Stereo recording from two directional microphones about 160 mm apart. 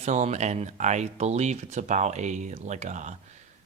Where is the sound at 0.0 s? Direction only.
45° right (ahead or behind).